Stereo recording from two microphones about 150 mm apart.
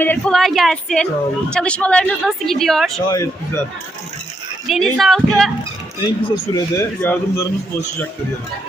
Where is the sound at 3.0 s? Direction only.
25° left (ahead or behind).